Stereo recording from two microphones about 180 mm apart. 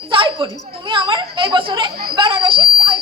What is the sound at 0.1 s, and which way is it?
Speech, 30° right (ahead or behind).